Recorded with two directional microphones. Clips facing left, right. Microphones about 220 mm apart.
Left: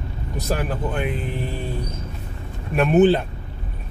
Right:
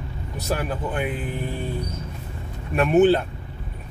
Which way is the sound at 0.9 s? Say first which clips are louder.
Left 1 dB; 5° right (ahead or behind).